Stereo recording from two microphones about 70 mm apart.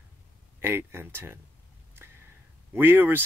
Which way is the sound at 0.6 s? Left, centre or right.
Right.